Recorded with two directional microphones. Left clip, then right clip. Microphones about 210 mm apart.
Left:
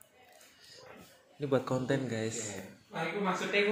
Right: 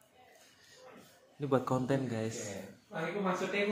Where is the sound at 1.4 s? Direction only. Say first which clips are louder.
Even; 15° right (ahead or behind).